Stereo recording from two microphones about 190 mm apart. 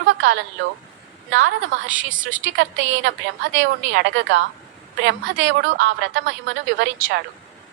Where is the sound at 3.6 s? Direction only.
65° right (ahead or behind).